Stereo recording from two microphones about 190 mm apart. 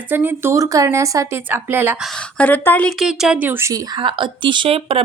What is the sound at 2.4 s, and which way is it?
Speech, 10° left (ahead or behind).